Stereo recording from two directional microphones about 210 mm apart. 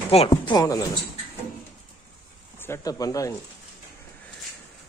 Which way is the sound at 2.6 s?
15° left (ahead or behind).